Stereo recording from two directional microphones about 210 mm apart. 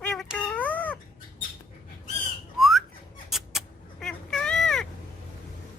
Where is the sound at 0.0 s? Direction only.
5° left (ahead or behind).